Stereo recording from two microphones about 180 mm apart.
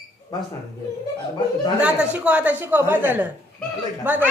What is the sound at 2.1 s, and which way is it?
A man's voice, 5° right (ahead or behind).